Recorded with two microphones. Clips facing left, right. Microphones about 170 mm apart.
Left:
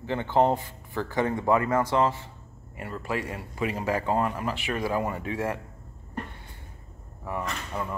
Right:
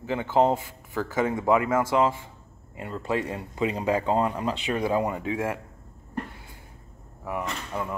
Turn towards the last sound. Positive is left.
turn(degrees=-5)  # may be behind; listen again after turning